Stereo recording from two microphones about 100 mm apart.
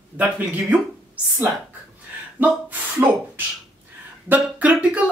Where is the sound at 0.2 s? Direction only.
15° right (ahead or behind).